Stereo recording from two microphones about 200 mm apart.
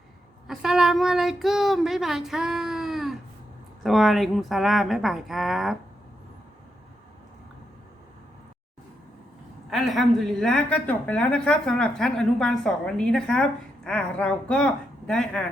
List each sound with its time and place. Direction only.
0.4 s a woman's voice: 5° right (ahead or behind)
9.6 s a woman's voice: centre (ahead or behind)